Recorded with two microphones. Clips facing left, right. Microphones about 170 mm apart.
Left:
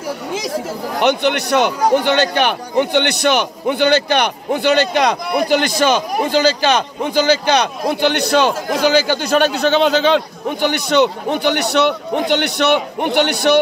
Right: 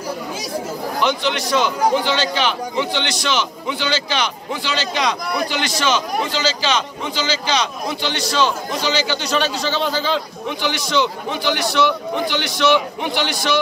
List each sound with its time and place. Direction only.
0.9 s a man's voice: 60° left (ahead or behind)